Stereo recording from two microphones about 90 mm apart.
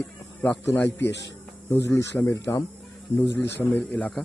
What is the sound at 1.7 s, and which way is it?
A man's voice, 25° left (ahead or behind).